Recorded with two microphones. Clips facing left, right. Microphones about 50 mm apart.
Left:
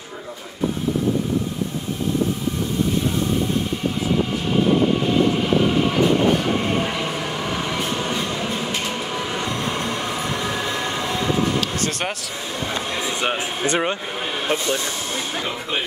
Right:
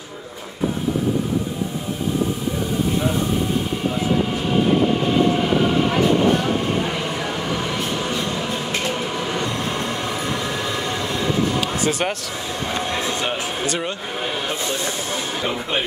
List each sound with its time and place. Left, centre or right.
7.1 s vehicle: centre
9.1 s train: centre
11.6 s music: centre
13.2 s speech: left